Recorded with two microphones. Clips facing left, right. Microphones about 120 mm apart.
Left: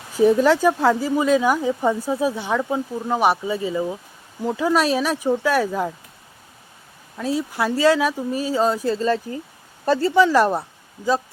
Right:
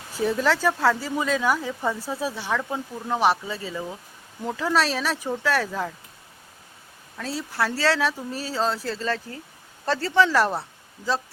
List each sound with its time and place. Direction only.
0.2 s speech: 15° left (ahead or behind)
7.2 s speech: 15° left (ahead or behind)